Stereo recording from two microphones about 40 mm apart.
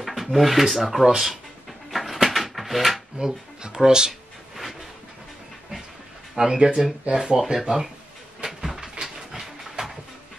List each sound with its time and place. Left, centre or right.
0.0 s speech: centre
1.9 s a sound: centre
3.2 s speech: centre
6.3 s speech: centre
8.5 s a sound: centre
9.0 s dog: centre